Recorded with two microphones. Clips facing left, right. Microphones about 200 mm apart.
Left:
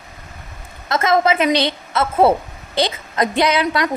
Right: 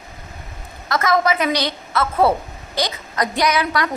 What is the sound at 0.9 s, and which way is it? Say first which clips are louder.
A woman's voice: left 2 dB; 25° left (ahead or behind).